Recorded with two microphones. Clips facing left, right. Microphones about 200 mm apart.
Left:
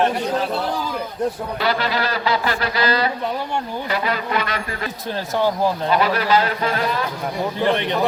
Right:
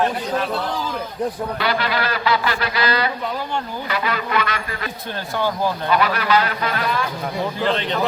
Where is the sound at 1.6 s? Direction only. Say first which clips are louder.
Left 2 dB; 35° left (ahead or behind).